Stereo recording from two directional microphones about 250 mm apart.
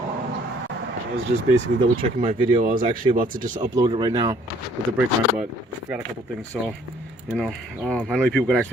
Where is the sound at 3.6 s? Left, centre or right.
Centre.